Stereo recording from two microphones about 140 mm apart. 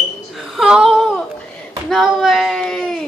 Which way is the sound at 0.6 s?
5° right (ahead or behind).